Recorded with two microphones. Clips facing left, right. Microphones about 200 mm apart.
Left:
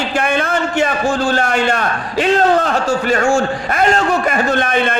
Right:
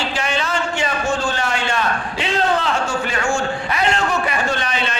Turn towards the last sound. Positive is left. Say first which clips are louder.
# left 7 dB
turn(degrees=55)  # may be behind; listen again after turning